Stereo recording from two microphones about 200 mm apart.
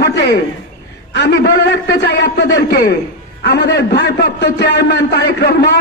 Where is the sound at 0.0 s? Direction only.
60° left (ahead or behind).